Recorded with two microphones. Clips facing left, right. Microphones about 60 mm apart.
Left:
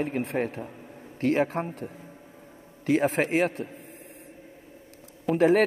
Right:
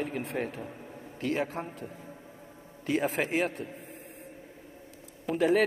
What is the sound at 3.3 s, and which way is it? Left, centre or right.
Speech, left.